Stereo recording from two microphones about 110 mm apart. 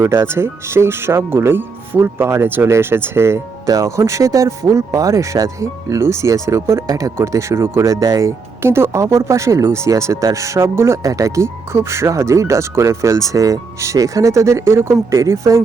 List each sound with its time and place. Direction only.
0.0 s speech: 25° right (ahead or behind)